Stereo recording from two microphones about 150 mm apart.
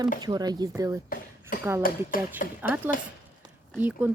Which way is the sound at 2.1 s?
70° left (ahead or behind).